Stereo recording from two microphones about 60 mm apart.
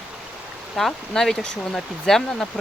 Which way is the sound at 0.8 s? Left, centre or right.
Centre.